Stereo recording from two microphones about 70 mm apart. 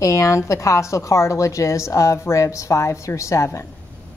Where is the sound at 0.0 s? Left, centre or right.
Left.